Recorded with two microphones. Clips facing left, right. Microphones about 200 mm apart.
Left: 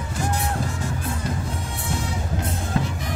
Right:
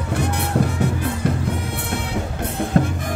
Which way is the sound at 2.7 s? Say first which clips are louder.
Right 7 dB; 50° right (ahead or behind).